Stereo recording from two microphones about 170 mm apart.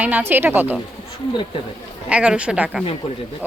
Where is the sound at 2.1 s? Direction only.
5° right (ahead or behind).